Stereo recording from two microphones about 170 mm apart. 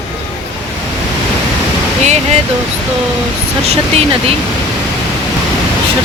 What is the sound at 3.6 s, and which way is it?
Speech, 35° right (ahead or behind).